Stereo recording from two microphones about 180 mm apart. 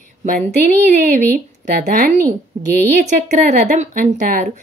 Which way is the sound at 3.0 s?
40° right (ahead or behind).